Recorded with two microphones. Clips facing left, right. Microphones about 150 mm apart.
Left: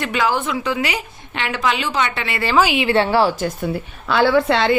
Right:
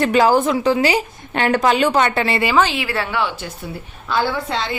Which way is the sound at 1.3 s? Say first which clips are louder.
Right 5 dB; 45° right (ahead or behind).